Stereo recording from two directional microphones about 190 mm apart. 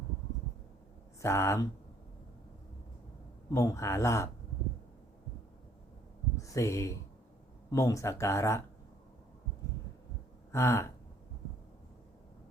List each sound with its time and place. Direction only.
1.2 s speech: 15° left (ahead or behind)
3.5 s speech: 15° left (ahead or behind)
6.3 s speech: 15° left (ahead or behind)
10.5 s speech: 15° left (ahead or behind)